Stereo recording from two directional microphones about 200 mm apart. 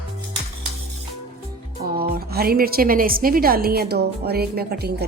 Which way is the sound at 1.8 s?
50° right (ahead or behind).